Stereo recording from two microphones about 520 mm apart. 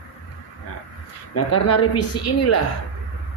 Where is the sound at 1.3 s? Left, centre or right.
Left.